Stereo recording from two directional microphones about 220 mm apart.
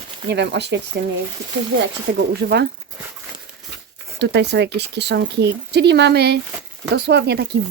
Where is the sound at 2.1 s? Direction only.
45° right (ahead or behind).